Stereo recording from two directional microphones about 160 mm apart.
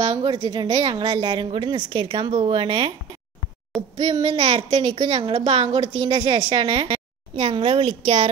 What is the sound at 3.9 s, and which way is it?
A child's voice, 30° right (ahead or behind).